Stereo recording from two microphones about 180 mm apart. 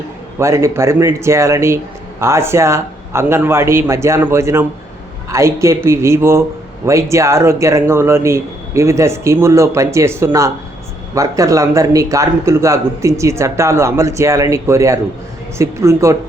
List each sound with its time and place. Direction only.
0.3 s a man's voice: 15° right (ahead or behind)